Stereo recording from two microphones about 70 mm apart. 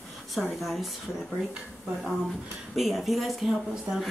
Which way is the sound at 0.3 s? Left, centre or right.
Centre.